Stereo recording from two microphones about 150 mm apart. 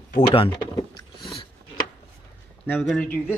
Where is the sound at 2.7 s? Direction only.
5° left (ahead or behind).